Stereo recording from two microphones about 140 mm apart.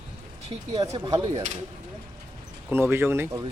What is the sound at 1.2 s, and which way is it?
Speech, 45° right (ahead or behind).